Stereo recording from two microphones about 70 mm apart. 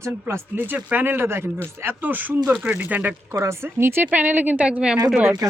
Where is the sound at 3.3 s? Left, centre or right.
Right; by 5.0 s centre.